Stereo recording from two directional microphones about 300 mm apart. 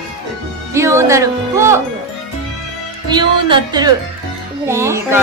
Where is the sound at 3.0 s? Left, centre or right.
Centre.